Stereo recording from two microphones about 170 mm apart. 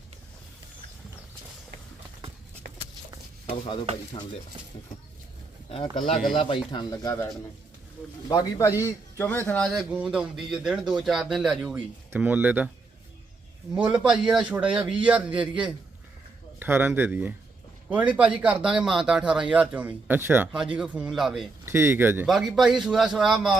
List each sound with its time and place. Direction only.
5.6 s speech: 30° left (ahead or behind)
8.3 s a man's voice: 20° left (ahead or behind)
9.6 s a man's voice: centre (ahead or behind)
13.7 s a man's voice: 10° right (ahead or behind)
21.6 s a man's voice: 15° right (ahead or behind)
22.3 s speech: centre (ahead or behind)